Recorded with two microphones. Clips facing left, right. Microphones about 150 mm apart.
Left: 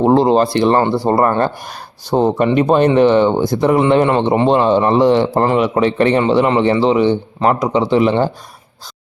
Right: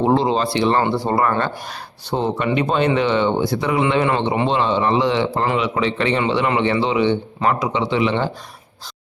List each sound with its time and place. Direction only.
0.0 s a man's voice: 45° left (ahead or behind)